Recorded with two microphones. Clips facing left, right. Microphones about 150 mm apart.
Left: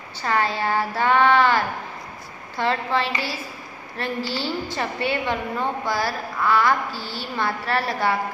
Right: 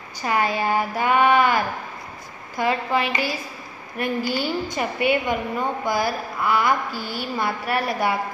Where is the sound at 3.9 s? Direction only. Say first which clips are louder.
Right 3 dB; 30° left (ahead or behind).